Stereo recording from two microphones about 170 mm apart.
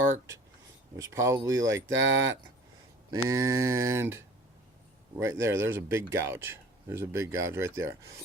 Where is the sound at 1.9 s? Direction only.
90° right.